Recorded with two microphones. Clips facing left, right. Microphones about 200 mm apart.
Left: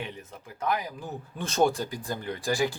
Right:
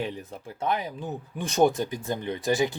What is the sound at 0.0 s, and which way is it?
Speech, 30° right (ahead or behind).